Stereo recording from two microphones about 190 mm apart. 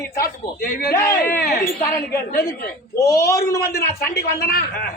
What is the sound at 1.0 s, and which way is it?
Speech, 15° left (ahead or behind).